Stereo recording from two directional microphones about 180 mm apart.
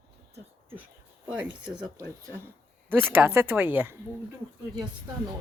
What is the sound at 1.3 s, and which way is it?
Speech, 5° right (ahead or behind).